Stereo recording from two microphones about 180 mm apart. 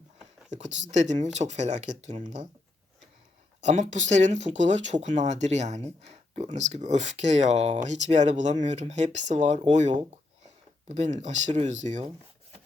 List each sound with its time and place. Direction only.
0.5 s speech: 40° right (ahead or behind)
3.6 s speech: 40° right (ahead or behind)